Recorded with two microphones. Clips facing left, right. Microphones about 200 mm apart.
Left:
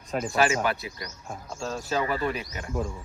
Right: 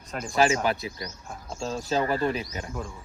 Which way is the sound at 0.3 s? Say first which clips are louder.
Right 2 dB; 30° right (ahead or behind).